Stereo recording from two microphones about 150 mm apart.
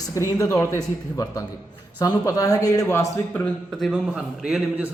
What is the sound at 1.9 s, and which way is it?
A man's voice, 25° left (ahead or behind).